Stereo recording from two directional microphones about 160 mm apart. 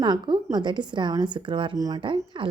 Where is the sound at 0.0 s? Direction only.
30° right (ahead or behind).